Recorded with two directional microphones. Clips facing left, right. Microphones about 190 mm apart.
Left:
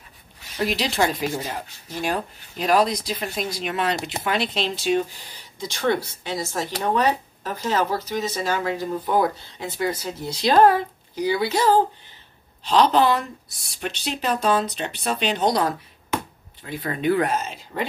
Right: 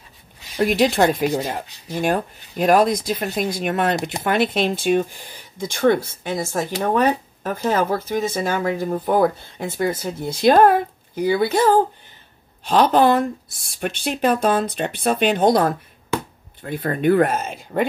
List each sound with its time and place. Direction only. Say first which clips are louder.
0.6 s speech: right 6 dB; 50° right (ahead or behind)